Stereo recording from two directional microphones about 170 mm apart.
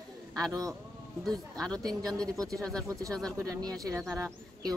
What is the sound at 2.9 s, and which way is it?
Speech, 20° right (ahead or behind).